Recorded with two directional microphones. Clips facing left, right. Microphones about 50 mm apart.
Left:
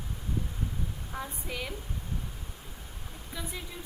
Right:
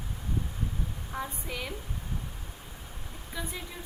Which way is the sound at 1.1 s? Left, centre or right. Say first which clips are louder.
Right 2 dB; centre.